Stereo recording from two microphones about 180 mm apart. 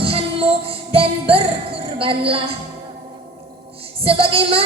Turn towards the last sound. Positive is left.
turn(degrees=-30)  # may be behind; listen again after turning